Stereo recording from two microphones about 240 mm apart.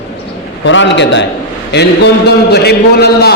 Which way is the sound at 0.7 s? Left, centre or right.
Left.